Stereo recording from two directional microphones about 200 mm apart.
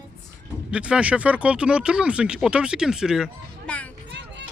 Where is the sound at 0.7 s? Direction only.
5° right (ahead or behind).